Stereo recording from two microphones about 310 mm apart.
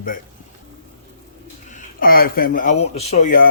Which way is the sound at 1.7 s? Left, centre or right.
Left.